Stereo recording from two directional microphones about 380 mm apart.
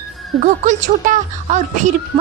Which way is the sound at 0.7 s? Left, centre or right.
Centre.